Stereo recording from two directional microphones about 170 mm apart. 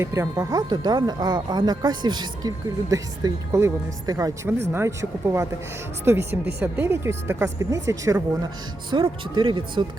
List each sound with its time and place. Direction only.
0.0 s speech: 20° right (ahead or behind)